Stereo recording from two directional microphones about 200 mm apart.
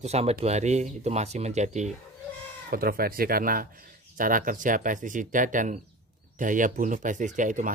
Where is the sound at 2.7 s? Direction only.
45° right (ahead or behind).